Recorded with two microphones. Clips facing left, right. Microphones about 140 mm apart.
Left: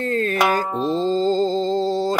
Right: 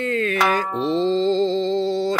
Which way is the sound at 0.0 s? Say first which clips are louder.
Left 1 dB; 40° left (ahead or behind).